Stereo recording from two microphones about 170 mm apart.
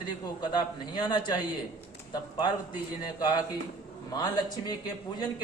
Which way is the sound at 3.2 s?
25° left (ahead or behind).